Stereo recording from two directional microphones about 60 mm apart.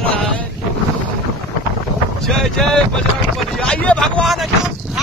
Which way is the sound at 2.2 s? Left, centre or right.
Centre.